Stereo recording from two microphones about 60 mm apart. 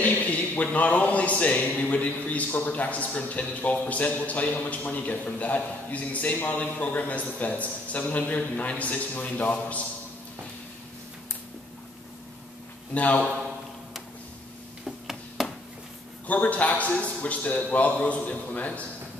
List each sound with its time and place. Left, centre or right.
0.0 s a man's voice: left
12.9 s a man's voice: left
14.9 s a sound: centre
16.3 s a man's voice: left